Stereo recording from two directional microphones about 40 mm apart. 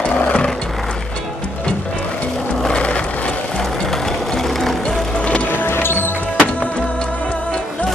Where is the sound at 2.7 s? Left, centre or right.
Left.